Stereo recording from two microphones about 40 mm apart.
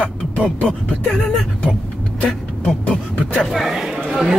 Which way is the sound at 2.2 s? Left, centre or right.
Left.